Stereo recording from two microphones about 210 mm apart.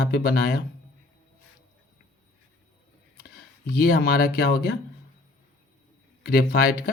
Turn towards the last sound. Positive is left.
turn(degrees=45)  # may be behind; listen again after turning